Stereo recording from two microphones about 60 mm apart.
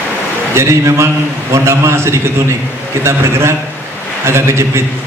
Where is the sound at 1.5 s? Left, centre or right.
Right.